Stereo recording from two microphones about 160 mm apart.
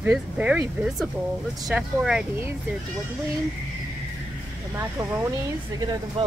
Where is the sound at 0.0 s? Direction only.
10° right (ahead or behind).